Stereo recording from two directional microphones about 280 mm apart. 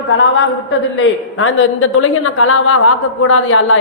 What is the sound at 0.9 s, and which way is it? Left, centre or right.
A woman's voice, left.